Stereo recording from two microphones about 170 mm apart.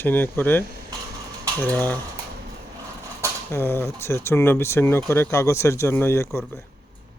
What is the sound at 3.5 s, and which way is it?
Speech, 15° left (ahead or behind).